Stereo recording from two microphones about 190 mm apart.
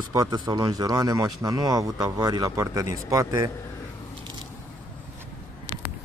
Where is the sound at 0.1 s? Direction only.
20° right (ahead or behind).